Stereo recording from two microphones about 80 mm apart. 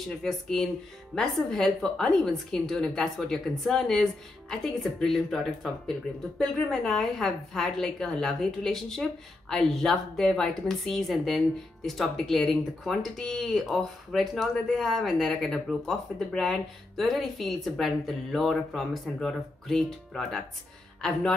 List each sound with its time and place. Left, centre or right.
0.2 s a woman's voice: centre